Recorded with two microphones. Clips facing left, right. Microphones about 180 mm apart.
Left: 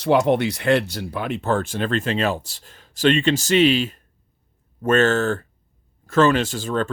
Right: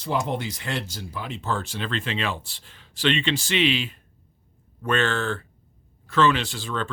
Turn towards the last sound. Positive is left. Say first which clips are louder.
# left 7 dB
turn(degrees=45)  # may be behind; listen again after turning